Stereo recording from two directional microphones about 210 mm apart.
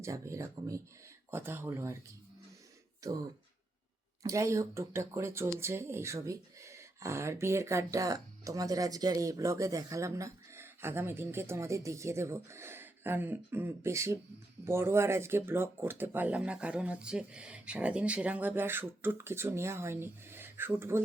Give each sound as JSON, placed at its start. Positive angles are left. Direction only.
{"t": 0.0, "sound": "speech", "side_deg": -15}
{"t": 3.0, "sound": "speech", "side_deg": -15}
{"t": 4.2, "sound": "speech", "side_deg": -15}